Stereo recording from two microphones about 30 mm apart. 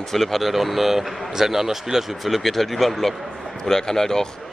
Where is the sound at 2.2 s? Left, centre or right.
Centre.